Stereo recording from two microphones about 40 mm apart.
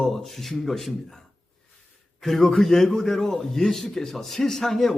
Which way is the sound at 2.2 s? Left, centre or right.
Centre.